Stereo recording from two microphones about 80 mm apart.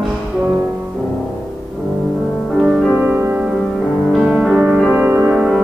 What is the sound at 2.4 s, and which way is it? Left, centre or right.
Music, centre.